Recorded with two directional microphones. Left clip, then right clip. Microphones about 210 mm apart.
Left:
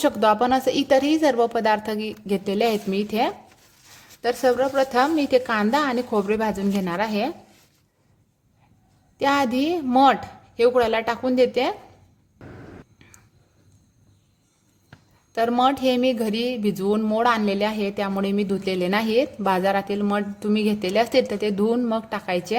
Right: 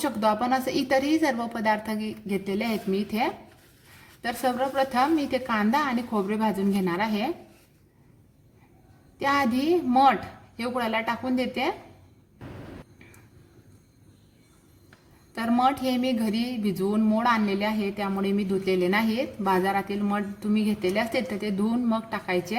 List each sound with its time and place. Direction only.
0.0 s speech: 35° left (ahead or behind)
9.1 s speech: 35° left (ahead or behind)
15.3 s speech: 35° left (ahead or behind)